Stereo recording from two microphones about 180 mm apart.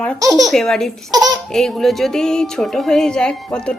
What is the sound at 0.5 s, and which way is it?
A woman's voice, 5° left (ahead or behind).